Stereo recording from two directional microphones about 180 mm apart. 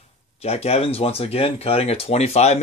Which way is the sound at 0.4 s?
35° left (ahead or behind).